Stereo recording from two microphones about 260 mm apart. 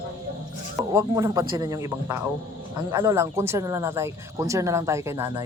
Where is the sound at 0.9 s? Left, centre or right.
Centre.